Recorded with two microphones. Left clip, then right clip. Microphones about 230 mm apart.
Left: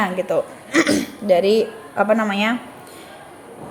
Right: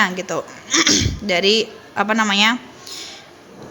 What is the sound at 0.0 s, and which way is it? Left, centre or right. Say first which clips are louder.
Speech: even; centre.